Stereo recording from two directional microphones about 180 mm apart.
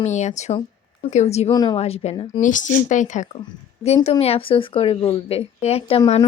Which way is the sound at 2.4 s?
45° left (ahead or behind).